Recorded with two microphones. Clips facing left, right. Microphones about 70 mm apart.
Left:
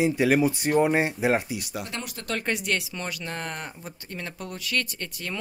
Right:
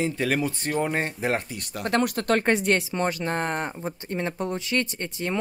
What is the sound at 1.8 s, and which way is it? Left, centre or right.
Speech, right.